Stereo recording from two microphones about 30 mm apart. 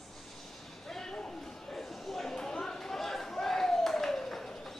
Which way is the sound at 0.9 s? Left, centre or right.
Centre.